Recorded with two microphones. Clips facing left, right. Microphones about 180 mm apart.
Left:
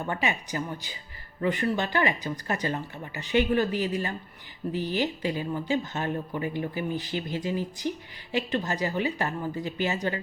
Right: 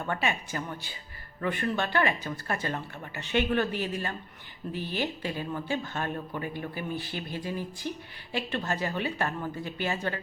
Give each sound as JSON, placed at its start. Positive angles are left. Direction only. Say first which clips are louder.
{"t": 0.0, "sound": "speech", "louder": "left 1 dB", "side_deg": 15}